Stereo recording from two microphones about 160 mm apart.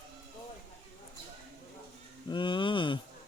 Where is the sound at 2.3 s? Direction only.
30° left (ahead or behind).